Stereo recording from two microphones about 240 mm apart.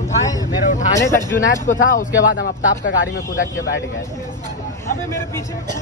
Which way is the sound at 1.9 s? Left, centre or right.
Left.